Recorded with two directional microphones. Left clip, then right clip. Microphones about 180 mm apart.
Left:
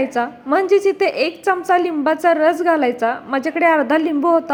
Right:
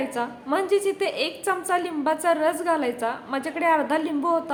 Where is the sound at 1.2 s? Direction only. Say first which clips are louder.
Left 8 dB; 30° left (ahead or behind).